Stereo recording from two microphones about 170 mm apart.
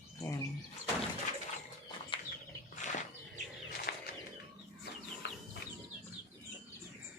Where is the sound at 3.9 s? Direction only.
65° left (ahead or behind).